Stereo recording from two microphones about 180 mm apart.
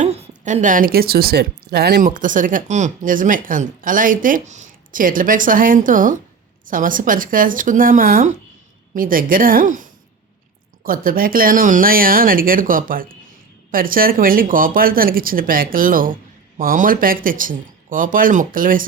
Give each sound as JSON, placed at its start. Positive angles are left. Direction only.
{"t": 0.0, "sound": "a woman's voice", "side_deg": -40}